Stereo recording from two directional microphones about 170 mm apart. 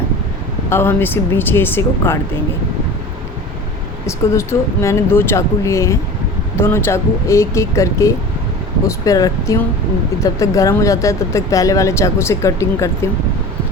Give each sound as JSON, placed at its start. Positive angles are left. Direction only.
{"t": 0.7, "sound": "speech", "side_deg": 15}
{"t": 4.0, "sound": "speech", "side_deg": 15}